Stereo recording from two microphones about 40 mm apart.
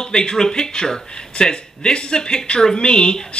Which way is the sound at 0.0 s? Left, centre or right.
Centre.